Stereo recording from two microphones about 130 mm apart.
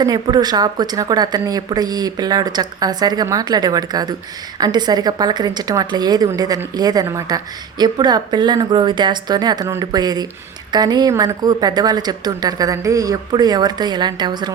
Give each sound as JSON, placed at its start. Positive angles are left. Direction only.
{"t": 0.0, "sound": "speech", "side_deg": -30}